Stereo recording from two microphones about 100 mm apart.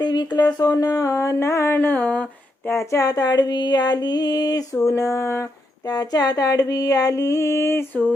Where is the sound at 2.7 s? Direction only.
30° left (ahead or behind).